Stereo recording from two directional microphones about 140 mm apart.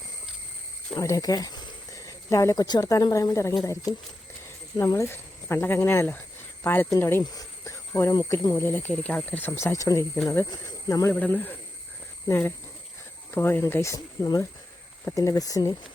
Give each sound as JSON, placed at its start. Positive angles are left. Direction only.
{"t": 0.9, "sound": "speech", "side_deg": 25}
{"t": 4.8, "sound": "speech", "side_deg": 20}
{"t": 11.1, "sound": "speech", "side_deg": 10}